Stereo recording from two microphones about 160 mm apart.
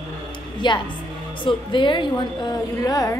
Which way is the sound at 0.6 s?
30° left (ahead or behind).